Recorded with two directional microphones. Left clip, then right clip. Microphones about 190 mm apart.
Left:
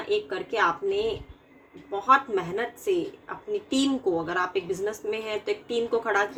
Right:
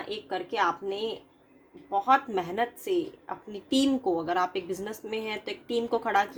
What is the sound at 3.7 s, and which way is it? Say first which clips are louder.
A woman's voice: right 1 dB; 45° right (ahead or behind).